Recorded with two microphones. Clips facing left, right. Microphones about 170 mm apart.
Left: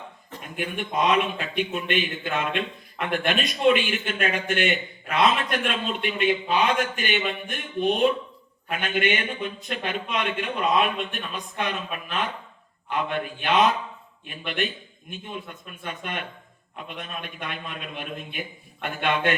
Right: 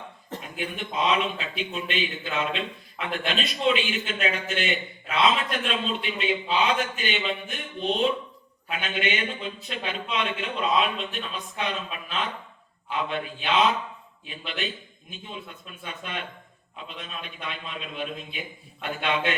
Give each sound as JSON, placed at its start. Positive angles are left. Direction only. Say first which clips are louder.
{"t": 0.5, "sound": "a man's voice", "louder": "left 4 dB", "side_deg": 55}